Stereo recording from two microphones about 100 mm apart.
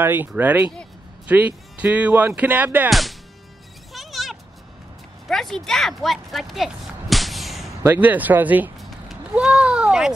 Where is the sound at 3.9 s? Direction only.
Centre (ahead or behind).